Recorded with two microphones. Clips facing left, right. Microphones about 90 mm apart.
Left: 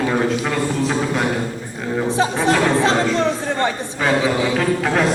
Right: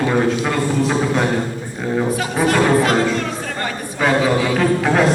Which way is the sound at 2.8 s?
25° left (ahead or behind).